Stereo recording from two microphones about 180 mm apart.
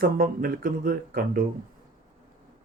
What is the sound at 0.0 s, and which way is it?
Speech, 55° right (ahead or behind).